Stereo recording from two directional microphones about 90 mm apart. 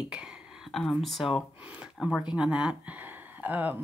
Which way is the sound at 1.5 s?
15° right (ahead or behind).